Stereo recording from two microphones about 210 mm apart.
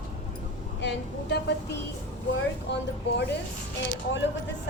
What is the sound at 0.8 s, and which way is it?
Speech, 55° left (ahead or behind).